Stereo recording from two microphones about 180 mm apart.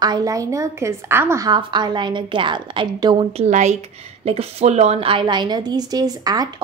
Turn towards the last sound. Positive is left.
turn(degrees=-20)  # may be behind; listen again after turning